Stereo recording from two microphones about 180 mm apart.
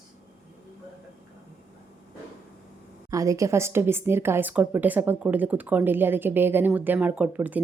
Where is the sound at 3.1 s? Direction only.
15° right (ahead or behind).